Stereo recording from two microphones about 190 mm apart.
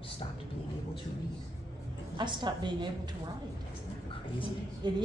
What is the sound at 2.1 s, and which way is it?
Speech, 25° right (ahead or behind).